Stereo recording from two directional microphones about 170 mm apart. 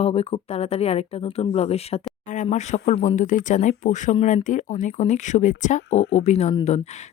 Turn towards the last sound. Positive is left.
turn(degrees=40)  # may be behind; listen again after turning